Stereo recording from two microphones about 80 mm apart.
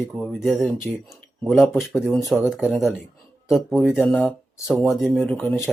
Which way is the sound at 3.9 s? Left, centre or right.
Centre.